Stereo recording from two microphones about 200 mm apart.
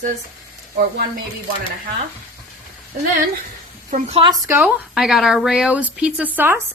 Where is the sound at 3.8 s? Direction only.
40° right (ahead or behind).